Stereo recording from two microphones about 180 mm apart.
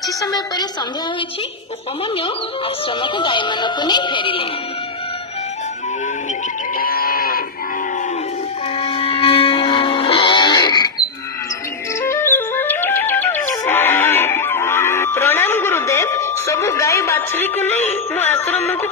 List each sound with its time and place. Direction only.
0.2 s speech: 20° left (ahead or behind)
3.0 s speech: 25° left (ahead or behind)
6.8 s livestock: 55° left (ahead or behind)
8.7 s music: 30° left (ahead or behind)
12.0 s music: 15° left (ahead or behind)